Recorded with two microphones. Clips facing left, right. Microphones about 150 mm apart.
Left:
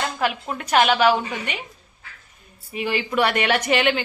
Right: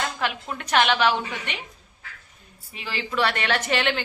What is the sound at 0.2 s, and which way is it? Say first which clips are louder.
A woman's voice: left 4 dB; 5° left (ahead or behind).